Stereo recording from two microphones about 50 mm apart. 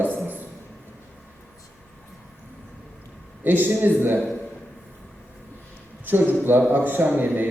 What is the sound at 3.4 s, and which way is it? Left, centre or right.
Speech, right.